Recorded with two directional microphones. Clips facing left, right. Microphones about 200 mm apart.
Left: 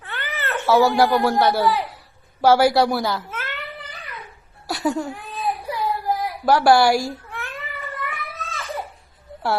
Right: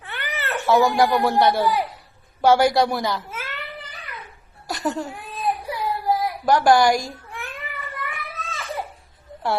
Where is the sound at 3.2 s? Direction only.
10° right (ahead or behind).